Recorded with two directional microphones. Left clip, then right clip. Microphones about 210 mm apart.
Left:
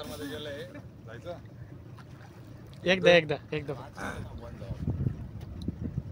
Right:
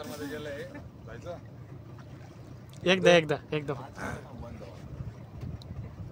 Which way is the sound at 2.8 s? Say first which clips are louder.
Even; 20° right (ahead or behind).